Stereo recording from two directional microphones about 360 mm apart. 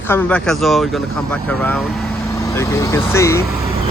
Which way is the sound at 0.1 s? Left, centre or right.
Centre.